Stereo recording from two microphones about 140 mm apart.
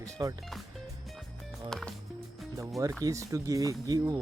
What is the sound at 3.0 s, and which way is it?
Speech, 20° right (ahead or behind).